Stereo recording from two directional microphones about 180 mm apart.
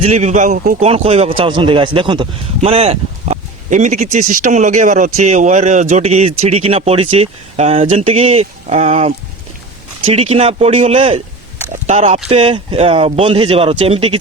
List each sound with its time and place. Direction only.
0.0 s speech: 35° right (ahead or behind)
0.8 s speech: 35° right (ahead or behind)